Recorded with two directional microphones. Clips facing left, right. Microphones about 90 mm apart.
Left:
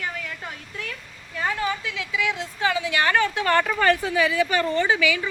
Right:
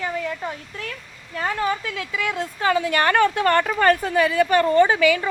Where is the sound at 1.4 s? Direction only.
40° right (ahead or behind).